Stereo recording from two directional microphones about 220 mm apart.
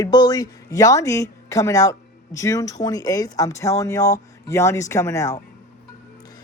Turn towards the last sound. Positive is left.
turn(degrees=15)  # may be behind; listen again after turning